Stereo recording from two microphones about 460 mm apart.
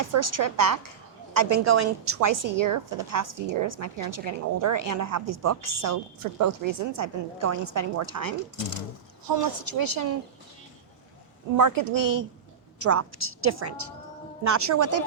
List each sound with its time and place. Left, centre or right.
0.1 s a woman's voice: right
11.5 s a woman's voice: right